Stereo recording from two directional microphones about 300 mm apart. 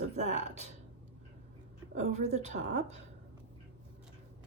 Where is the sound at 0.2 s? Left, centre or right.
Right.